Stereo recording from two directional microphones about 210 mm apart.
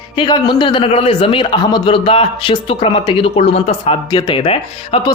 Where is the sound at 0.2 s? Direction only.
20° left (ahead or behind).